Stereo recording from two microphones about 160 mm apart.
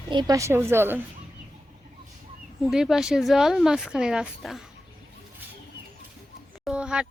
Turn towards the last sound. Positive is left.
turn(degrees=-5)  # may be behind; listen again after turning